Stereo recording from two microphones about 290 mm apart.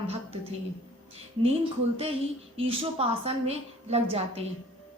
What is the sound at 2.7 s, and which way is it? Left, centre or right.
A woman's voice, centre.